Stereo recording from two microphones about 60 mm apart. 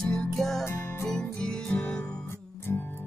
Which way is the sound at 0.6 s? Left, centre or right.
Left.